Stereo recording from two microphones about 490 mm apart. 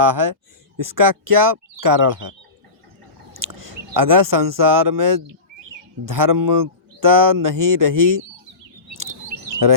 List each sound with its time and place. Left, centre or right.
0.0 s speech: right
3.3 s speech: right
9.5 s bird: right